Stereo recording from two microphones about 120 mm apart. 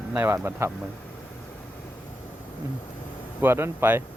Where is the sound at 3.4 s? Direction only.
20° right (ahead or behind).